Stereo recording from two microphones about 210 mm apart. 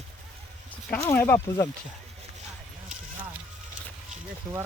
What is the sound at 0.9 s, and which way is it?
Speech, 10° left (ahead or behind).